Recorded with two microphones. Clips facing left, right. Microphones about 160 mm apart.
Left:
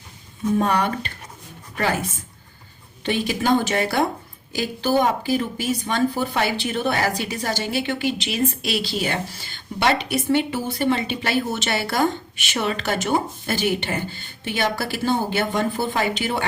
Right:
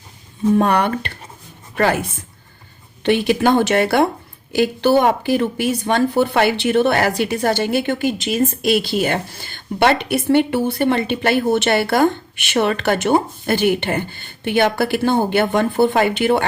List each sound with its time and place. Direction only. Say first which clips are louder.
0.6 s speech: right 4 dB; 65° right (ahead or behind)